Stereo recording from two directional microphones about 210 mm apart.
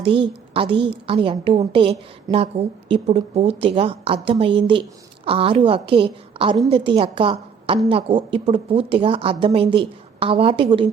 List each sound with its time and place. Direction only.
0.0 s a woman's voice: 25° right (ahead or behind)